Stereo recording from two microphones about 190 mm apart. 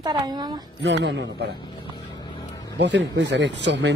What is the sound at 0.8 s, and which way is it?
Speech, 65° right (ahead or behind).